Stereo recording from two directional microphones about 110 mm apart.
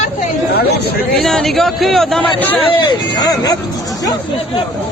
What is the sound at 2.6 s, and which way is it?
Speech, 45° left (ahead or behind).